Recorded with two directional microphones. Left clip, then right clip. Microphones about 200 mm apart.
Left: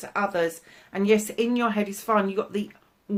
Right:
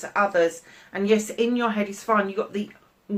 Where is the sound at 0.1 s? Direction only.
50° left (ahead or behind).